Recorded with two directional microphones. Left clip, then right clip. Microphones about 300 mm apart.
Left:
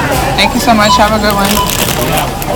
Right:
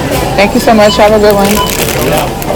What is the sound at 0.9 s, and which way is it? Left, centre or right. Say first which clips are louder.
Speech: right 3 dB; left.